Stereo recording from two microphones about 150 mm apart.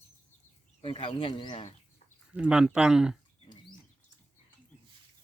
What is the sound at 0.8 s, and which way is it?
Speech, 35° left (ahead or behind).